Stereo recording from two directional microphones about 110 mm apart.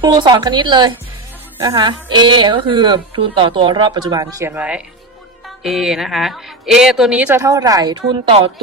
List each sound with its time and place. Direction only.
0.0 s a woman's voice: 45° right (ahead or behind)
4.5 s speech: 10° right (ahead or behind)
7.3 s speech: 35° right (ahead or behind); by 8.4 s 50° right (ahead or behind)